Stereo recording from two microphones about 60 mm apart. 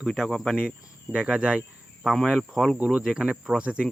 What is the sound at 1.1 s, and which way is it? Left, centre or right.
Speech, centre.